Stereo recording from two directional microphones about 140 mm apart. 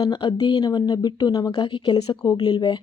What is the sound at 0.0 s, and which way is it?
Speech, 35° left (ahead or behind).